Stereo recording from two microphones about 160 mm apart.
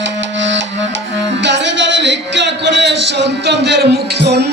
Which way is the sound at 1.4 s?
90° right.